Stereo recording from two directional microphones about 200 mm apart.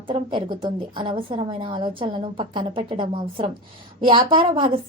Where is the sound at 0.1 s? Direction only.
25° right (ahead or behind).